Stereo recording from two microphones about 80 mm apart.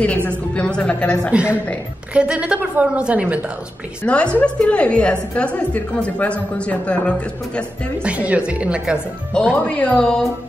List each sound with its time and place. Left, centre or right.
0.0 s a woman's voice: centre
1.3 s a woman's voice: centre
4.0 s a woman's voice: centre
8.0 s a woman's voice: centre
9.3 s a woman's voice: centre